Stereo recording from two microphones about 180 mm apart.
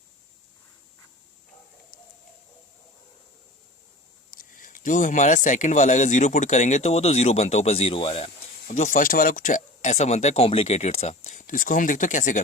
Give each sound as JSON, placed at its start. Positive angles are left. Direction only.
{"t": 4.3, "sound": "speech", "side_deg": 50}
{"t": 8.6, "sound": "speech", "side_deg": 45}